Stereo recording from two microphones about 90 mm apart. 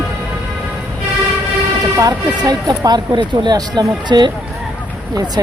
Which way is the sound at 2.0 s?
50° right (ahead or behind).